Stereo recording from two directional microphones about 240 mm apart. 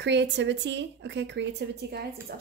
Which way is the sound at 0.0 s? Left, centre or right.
Right.